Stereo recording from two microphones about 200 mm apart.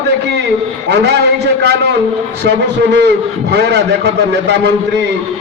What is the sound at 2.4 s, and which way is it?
A man's voice, 60° right (ahead or behind).